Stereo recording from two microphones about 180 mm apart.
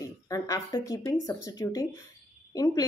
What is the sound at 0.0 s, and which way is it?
A woman's voice, 20° left (ahead or behind).